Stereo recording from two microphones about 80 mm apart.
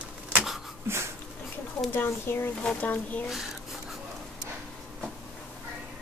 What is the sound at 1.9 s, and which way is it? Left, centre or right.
Speech, left.